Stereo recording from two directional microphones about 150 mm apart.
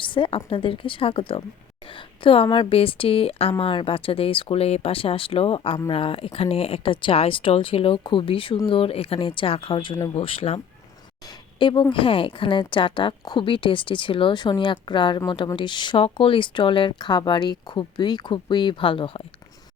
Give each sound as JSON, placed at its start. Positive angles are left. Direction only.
{"t": 0.0, "sound": "speech", "side_deg": 35}
{"t": 10.2, "sound": "speech", "side_deg": 40}
{"t": 11.6, "sound": "speech", "side_deg": 30}